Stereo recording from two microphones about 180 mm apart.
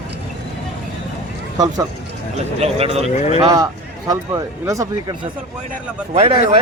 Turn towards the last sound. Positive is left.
turn(degrees=-35)  # may be behind; listen again after turning